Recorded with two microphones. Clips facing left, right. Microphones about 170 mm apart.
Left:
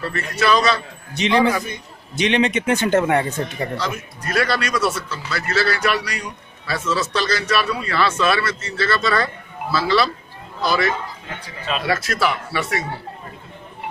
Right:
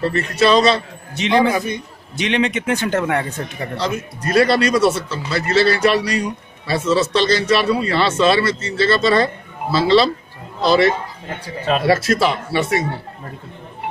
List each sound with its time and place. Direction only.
0.0 s a man's voice: 25° right (ahead or behind)
1.1 s a man's voice: centre (ahead or behind)
3.7 s a man's voice: 25° right (ahead or behind)